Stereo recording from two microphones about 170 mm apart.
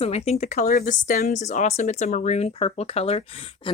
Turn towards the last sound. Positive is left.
turn(degrees=35)  # may be behind; listen again after turning